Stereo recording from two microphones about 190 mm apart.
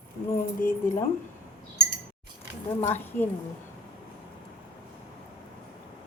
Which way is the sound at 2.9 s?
10° left (ahead or behind).